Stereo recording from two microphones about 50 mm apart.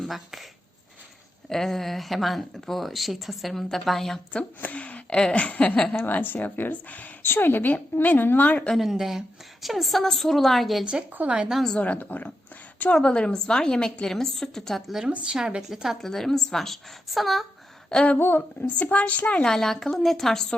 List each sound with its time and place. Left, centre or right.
0.0 s speech: centre
1.5 s speech: centre
4.6 s a woman's voice: left
6.1 s speech: left
7.2 s a woman's voice: left
8.7 s a woman's voice: centre
11.2 s a woman's voice: right
11.8 s speech: left
13.0 s a woman's voice: centre
15.1 s a woman's voice: centre
16.0 s speech: centre
18.2 s a woman's voice: left
18.8 s a woman's voice: left
19.5 s a woman's voice: centre